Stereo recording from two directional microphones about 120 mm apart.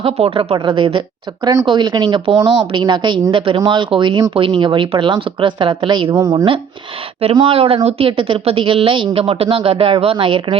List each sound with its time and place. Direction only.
0.0 s a woman's voice: 50° right (ahead or behind)
6.1 s a woman's voice: 30° right (ahead or behind)
7.3 s speech: 50° right (ahead or behind)